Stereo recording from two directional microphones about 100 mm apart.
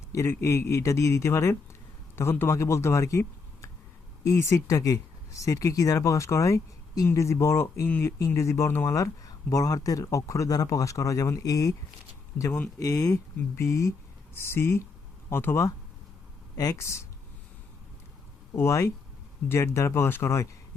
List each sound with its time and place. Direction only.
0.1 s speech: 30° left (ahead or behind)
12.4 s speech: 25° left (ahead or behind)
12.8 s speech: 35° left (ahead or behind)
18.5 s speech: 30° left (ahead or behind)